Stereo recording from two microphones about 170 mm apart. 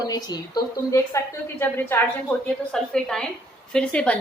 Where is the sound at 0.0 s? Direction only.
25° left (ahead or behind).